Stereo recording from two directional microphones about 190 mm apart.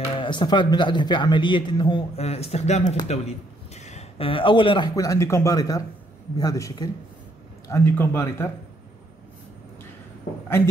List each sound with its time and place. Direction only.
0.2 s a man's voice: 25° left (ahead or behind)